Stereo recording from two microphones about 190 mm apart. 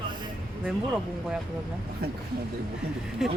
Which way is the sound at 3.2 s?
Centre (ahead or behind).